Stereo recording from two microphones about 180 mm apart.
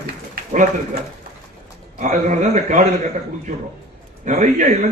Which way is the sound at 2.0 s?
45° right (ahead or behind).